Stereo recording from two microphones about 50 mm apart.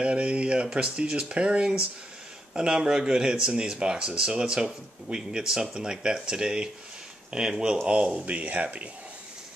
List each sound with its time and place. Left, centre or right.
0.0 s speech: right